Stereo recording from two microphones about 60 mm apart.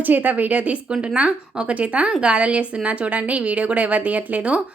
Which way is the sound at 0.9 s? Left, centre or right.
Centre.